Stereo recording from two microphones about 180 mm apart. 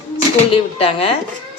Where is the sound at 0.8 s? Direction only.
30° left (ahead or behind).